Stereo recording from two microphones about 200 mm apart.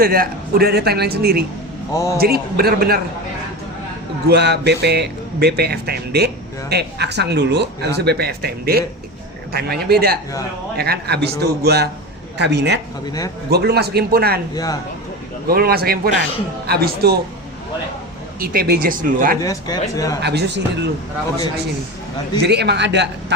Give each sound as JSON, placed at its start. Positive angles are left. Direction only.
{"t": 0.0, "sound": "speech", "side_deg": -50}
{"t": 1.9, "sound": "speech", "side_deg": 15}
{"t": 2.1, "sound": "speech", "side_deg": -50}
{"t": 4.3, "sound": "speech", "side_deg": -55}
{"t": 14.5, "sound": "a man's voice", "side_deg": 20}
{"t": 15.4, "sound": "speech", "side_deg": -50}
{"t": 18.3, "sound": "speech", "side_deg": -45}
{"t": 19.4, "sound": "speech", "side_deg": 20}
{"t": 20.2, "sound": "speech", "side_deg": -55}
{"t": 22.4, "sound": "speech", "side_deg": -55}